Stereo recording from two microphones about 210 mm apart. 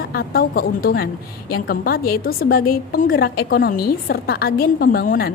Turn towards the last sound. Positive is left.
turn(degrees=45)  # may be behind; listen again after turning